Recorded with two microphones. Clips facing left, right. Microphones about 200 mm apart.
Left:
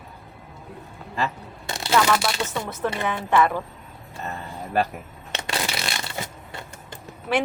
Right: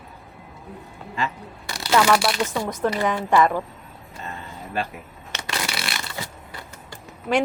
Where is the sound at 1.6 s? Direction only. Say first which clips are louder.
Left 3 dB; 25° left (ahead or behind).